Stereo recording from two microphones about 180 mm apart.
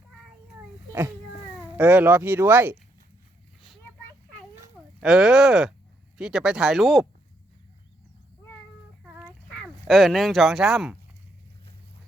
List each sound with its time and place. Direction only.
1.7 s speech: 10° right (ahead or behind)
4.9 s speech: centre (ahead or behind)
9.0 s a sound: 10° right (ahead or behind)
9.6 s speech: centre (ahead or behind)